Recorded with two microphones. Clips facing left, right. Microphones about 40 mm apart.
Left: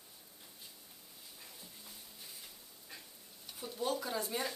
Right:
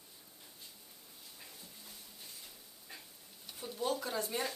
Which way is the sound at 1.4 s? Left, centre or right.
Centre.